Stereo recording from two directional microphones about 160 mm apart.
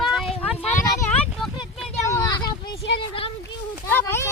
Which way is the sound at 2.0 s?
20° left (ahead or behind).